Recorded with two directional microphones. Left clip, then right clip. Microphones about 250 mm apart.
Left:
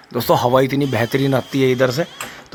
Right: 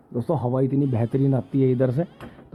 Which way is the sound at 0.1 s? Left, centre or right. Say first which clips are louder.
Left 11 dB; left.